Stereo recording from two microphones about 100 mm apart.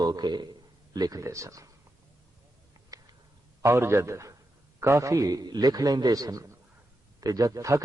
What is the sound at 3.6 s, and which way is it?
A man's voice, 25° right (ahead or behind).